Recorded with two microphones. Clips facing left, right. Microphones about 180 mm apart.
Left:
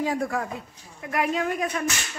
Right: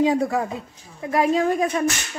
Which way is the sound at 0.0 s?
20° right (ahead or behind).